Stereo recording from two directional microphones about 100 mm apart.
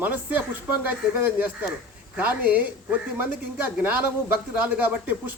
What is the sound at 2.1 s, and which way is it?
Speech, 15° right (ahead or behind).